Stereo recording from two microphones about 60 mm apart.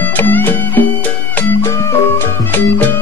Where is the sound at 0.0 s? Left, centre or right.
Left.